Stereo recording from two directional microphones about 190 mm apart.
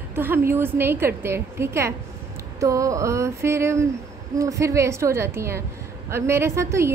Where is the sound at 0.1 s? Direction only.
10° right (ahead or behind).